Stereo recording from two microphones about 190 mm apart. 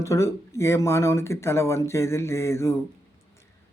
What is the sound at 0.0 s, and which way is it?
A man's voice, 15° left (ahead or behind).